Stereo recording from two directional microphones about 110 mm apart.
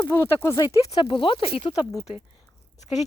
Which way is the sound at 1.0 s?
50° left (ahead or behind).